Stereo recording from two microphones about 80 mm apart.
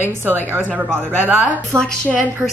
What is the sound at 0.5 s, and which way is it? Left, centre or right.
Speech, centre.